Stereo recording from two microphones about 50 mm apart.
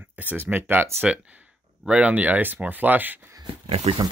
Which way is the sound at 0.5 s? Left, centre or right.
Right.